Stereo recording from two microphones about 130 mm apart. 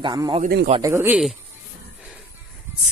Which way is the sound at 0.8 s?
20° right (ahead or behind).